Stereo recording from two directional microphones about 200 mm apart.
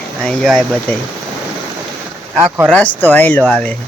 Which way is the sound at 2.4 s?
10° right (ahead or behind).